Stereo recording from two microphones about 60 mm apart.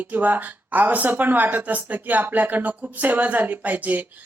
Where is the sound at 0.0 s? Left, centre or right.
Right.